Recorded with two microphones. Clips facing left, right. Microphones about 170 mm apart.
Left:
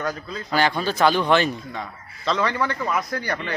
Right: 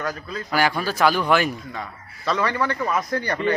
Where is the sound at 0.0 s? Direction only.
5° right (ahead or behind).